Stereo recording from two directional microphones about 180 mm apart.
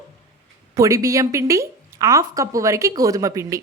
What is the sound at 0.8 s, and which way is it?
A woman's voice, 15° right (ahead or behind).